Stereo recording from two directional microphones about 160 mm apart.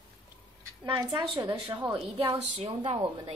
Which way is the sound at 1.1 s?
20° right (ahead or behind).